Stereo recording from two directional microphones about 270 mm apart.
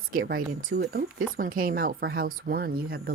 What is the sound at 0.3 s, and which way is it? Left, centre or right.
Speech, right.